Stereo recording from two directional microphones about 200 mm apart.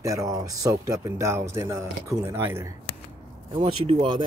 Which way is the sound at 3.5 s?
30° right (ahead or behind).